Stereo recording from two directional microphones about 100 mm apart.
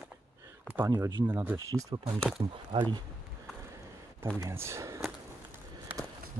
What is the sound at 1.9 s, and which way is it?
Speech, 45° right (ahead or behind).